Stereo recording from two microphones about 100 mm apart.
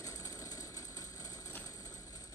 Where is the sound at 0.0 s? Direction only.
40° left (ahead or behind).